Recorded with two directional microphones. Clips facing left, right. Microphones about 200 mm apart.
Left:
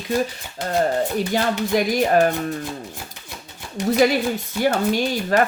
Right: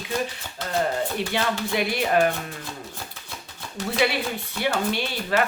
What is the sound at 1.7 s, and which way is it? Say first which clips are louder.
Speech: left 6 dB; 40° left (ahead or behind).